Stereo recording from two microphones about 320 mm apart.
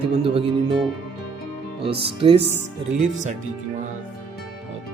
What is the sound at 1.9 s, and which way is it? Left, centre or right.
Speech, centre.